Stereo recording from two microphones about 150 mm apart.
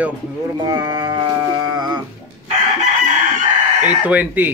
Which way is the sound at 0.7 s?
25° right (ahead or behind).